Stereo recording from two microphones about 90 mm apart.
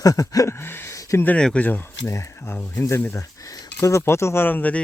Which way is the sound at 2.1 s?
35° left (ahead or behind).